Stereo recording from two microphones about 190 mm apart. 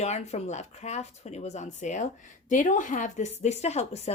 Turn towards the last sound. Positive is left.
turn(degrees=35)  # may be behind; listen again after turning